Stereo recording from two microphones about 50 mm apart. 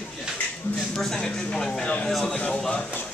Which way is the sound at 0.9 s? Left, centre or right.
Centre.